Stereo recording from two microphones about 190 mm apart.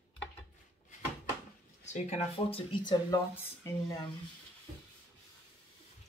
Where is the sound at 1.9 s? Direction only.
35° left (ahead or behind); by 4.1 s 15° left (ahead or behind).